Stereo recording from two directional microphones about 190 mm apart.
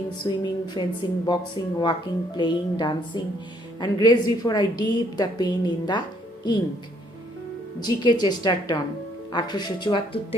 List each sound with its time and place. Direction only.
0.2 s a woman's voice: 20° left (ahead or behind)
7.8 s a woman's voice: 20° left (ahead or behind)